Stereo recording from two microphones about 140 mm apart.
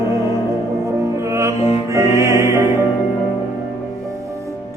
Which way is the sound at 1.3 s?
20° right (ahead or behind).